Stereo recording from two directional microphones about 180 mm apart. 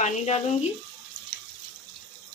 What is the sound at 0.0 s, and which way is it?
Speech, 40° left (ahead or behind).